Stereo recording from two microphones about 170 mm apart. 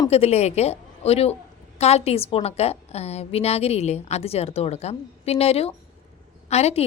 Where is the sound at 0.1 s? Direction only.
40° left (ahead or behind).